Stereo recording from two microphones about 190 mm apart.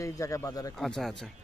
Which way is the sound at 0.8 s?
Centre (ahead or behind).